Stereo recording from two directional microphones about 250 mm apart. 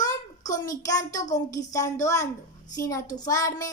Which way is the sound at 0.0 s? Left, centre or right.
Centre.